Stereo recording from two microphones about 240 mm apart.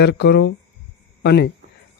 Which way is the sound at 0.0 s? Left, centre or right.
Left.